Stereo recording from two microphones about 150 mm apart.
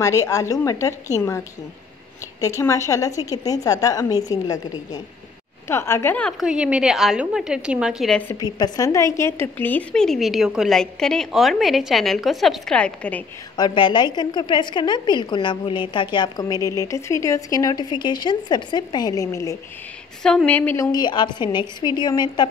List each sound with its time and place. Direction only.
0.0 s a woman's voice: 20° left (ahead or behind)
2.4 s a woman's voice: 20° left (ahead or behind)
6.4 s a woman's voice: 5° right (ahead or behind)
8.3 s a woman's voice: 25° left (ahead or behind); by 13.2 s 10° left (ahead or behind)
13.6 s a woman's voice: 35° left (ahead or behind)
20.2 s a woman's voice: 10° left (ahead or behind); by 22.5 s 30° left (ahead or behind)